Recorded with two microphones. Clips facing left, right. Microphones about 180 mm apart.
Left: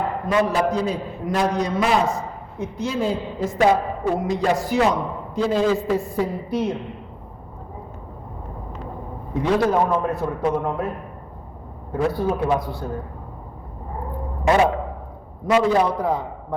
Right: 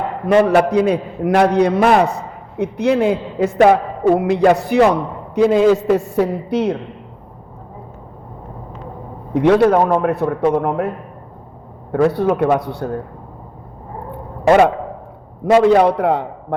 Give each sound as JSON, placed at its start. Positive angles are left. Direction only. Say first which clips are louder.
{"t": 0.4, "sound": "a man's voice", "louder": "right 8 dB", "side_deg": -65}
{"t": 9.3, "sound": "a man's voice", "louder": "right 7 dB", "side_deg": -70}
{"t": 15.4, "sound": "a man's voice", "louder": "right 7 dB", "side_deg": -70}